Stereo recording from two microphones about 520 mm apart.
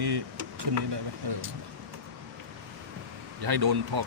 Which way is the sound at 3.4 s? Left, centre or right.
Right.